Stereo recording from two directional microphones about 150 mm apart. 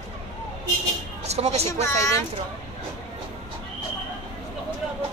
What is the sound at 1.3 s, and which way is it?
Speech, 45° right (ahead or behind).